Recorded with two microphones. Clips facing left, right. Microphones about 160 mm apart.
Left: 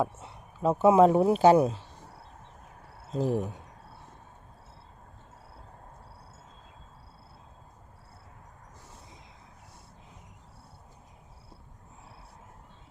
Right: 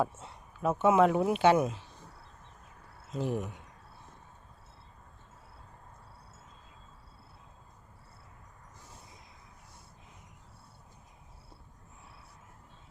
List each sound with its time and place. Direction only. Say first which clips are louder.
0.0 s speech: left 2 dB; 20° left (ahead or behind)
0.6 s speech: left 4 dB; 30° left (ahead or behind)
3.1 s speech: left 5 dB; 35° left (ahead or behind)